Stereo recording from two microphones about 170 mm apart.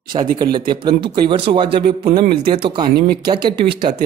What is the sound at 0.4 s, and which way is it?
A man's voice, 25° right (ahead or behind).